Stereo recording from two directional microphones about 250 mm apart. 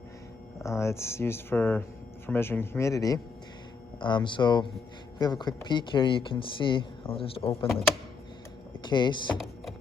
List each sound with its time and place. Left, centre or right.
0.6 s speech: centre
8.8 s speech: centre